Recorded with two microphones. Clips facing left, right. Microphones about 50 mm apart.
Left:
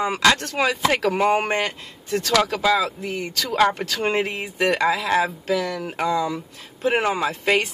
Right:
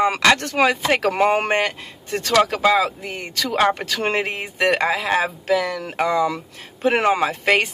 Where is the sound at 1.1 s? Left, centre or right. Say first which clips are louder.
Right 3 dB; right.